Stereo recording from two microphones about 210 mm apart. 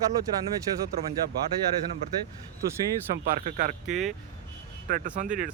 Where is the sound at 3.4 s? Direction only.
35° right (ahead or behind).